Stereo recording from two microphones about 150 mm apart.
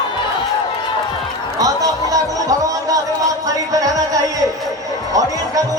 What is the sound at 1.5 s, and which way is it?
Music, 25° right (ahead or behind).